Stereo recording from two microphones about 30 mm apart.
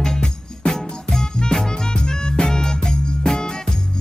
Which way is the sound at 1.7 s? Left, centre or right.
Left.